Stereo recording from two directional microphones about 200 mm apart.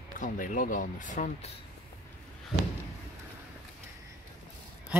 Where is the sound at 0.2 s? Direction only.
40° left (ahead or behind).